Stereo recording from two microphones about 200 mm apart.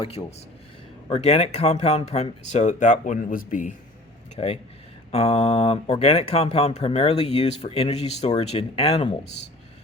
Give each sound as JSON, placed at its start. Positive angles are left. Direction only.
{"t": 0.0, "sound": "speech", "side_deg": 30}